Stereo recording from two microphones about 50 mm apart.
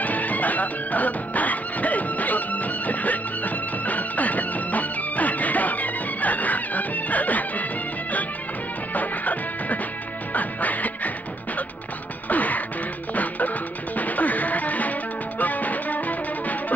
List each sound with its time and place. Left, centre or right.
0.0 s music: left
8.9 s music: left
10.3 s quack: left
12.3 s music: left